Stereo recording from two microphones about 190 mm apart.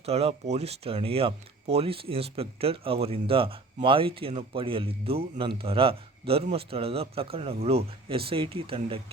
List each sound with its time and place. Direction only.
0.0 s speech: 30° right (ahead or behind)